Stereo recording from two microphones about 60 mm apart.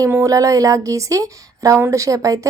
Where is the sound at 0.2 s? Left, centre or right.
Right.